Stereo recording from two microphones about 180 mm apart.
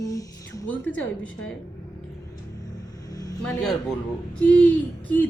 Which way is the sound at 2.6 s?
20° left (ahead or behind).